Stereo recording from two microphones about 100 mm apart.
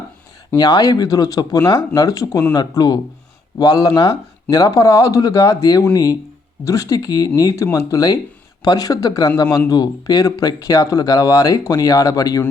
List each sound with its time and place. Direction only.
0.5 s speech: 40° left (ahead or behind)